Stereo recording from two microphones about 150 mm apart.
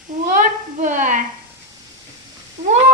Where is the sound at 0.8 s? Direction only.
55° right (ahead or behind).